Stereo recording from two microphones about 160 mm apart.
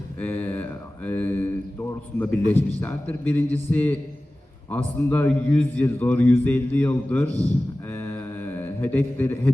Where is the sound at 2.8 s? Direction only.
10° left (ahead or behind).